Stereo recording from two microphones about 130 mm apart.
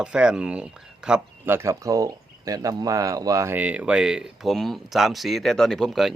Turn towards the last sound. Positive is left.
turn(degrees=0)  # may be behind; listen again after turning